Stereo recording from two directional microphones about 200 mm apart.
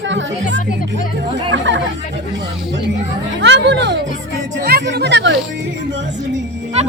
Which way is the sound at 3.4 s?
65° right (ahead or behind).